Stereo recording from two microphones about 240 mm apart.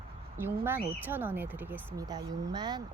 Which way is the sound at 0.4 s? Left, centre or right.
Centre.